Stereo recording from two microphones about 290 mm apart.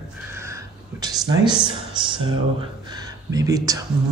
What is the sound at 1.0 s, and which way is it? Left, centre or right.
Speech, centre.